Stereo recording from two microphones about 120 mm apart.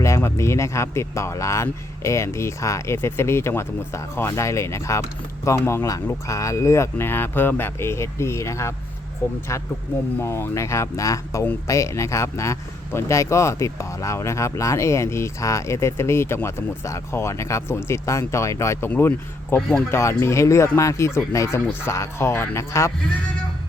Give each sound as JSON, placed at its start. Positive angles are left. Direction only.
{"t": 0.0, "sound": "speech", "side_deg": 25}
{"t": 19.5, "sound": "speech", "side_deg": 5}
{"t": 19.9, "sound": "speech", "side_deg": 25}